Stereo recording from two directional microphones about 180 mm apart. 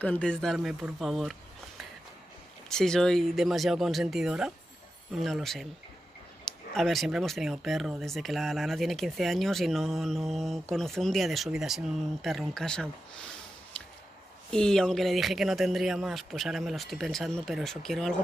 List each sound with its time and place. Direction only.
0.0 s speech: 5° left (ahead or behind)
2.7 s speech: 5° left (ahead or behind)
13.7 s a sound: 5° left (ahead or behind)
14.5 s speech: 5° left (ahead or behind)